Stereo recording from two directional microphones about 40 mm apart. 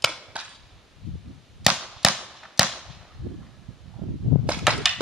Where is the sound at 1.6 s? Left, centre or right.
Centre.